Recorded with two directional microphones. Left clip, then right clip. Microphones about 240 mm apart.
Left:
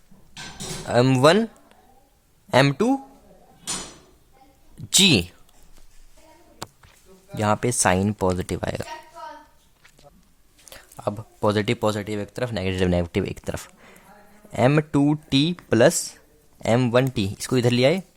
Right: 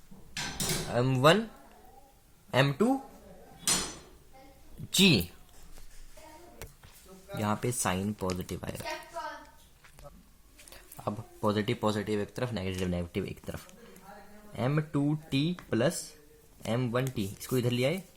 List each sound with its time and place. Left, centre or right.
0.9 s speech: left
2.5 s speech: left
4.9 s speech: left
7.3 s speech: left
10.7 s speech: left